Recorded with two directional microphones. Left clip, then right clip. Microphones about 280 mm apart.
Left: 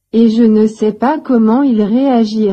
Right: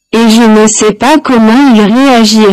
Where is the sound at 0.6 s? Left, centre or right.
Right.